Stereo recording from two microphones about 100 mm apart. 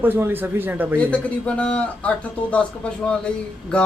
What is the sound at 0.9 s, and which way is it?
Speech, 10° left (ahead or behind).